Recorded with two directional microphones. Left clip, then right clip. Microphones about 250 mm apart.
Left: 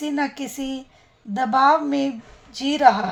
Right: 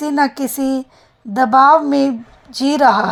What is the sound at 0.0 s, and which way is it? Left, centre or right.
Speech, right.